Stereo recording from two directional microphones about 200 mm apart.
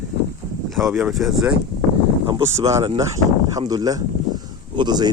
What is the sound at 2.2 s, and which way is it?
Speech, 20° right (ahead or behind).